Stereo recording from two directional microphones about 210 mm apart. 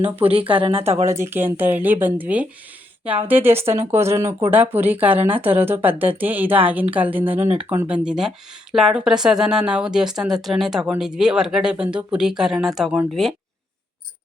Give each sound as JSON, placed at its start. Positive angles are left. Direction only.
{"t": 0.2, "sound": "speech", "side_deg": -25}
{"t": 1.0, "sound": "speech", "side_deg": -10}